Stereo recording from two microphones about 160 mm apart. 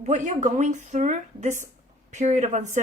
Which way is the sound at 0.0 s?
45° right (ahead or behind).